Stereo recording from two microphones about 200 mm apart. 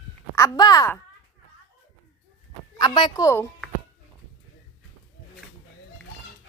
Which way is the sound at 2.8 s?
20° left (ahead or behind).